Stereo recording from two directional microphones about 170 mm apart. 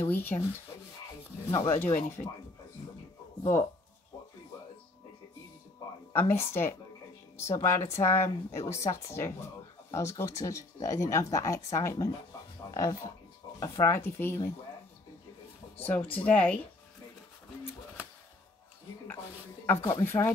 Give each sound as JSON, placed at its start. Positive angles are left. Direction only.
{"t": 0.0, "sound": "speech", "side_deg": 10}
{"t": 1.5, "sound": "speech", "side_deg": 20}
{"t": 6.1, "sound": "speech", "side_deg": 15}
{"t": 15.8, "sound": "speech", "side_deg": 10}
{"t": 19.9, "sound": "speech", "side_deg": 15}